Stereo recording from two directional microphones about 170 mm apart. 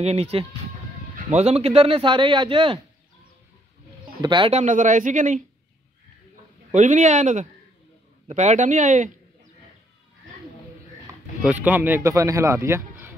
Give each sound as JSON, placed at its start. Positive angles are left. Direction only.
{"t": 0.0, "sound": "speech", "side_deg": -35}
{"t": 4.2, "sound": "speech", "side_deg": -25}
{"t": 4.5, "sound": "speech", "side_deg": -45}
{"t": 6.7, "sound": "speech", "side_deg": -45}
{"t": 11.4, "sound": "a man's voice", "side_deg": -10}